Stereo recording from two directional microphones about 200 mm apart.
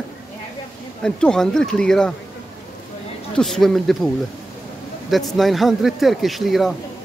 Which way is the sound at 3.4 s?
Centre (ahead or behind).